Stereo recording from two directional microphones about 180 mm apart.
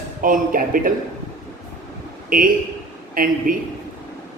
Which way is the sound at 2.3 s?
50° right (ahead or behind).